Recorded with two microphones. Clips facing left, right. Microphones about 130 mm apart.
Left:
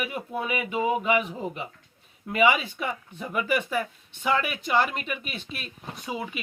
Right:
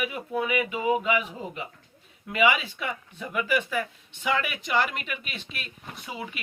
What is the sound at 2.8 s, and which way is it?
Speech, 35° left (ahead or behind).